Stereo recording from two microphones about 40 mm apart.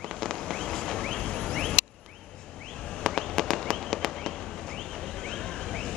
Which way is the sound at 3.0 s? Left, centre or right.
Centre.